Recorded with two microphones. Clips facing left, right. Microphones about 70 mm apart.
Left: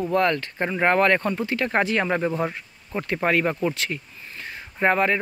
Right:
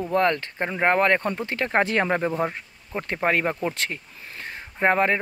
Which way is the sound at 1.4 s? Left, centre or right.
Right.